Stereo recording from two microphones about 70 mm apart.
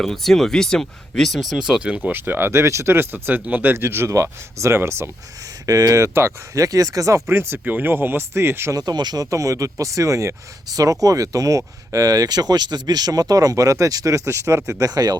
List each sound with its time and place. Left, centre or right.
0.0 s speech: centre
2.1 s speech: right
5.6 s speech: right
7.3 s speech: right
8.7 s speech: right
9.2 s speech: right
10.7 s speech: right